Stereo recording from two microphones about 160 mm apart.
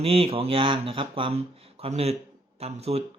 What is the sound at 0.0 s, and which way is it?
Speech, 35° right (ahead or behind).